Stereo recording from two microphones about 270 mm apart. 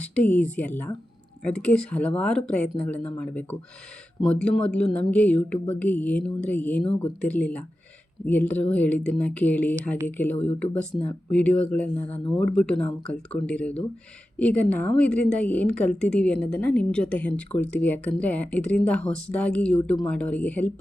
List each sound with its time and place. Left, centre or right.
0.0 s speech: centre
12.0 s speech: left
12.4 s speech: centre